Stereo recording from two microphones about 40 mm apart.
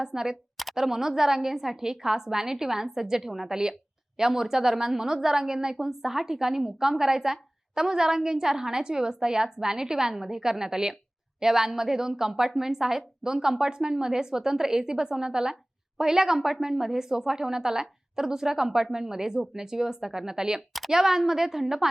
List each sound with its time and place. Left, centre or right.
0.0 s a woman's voice: centre
0.5 s a sound: centre
0.9 s a woman's voice: centre